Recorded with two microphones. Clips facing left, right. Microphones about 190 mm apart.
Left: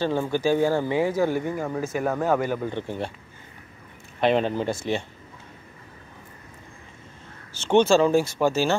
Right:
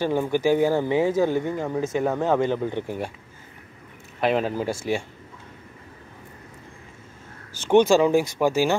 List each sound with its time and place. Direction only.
0.0 s speech: 15° right (ahead or behind)
1.3 s speech: 10° left (ahead or behind)
1.8 s speech: 20° right (ahead or behind)
4.2 s speech: 5° right (ahead or behind)
7.5 s speech: 10° right (ahead or behind)